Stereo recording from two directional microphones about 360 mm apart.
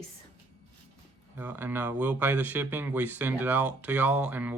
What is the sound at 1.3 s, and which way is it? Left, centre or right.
Speech, centre.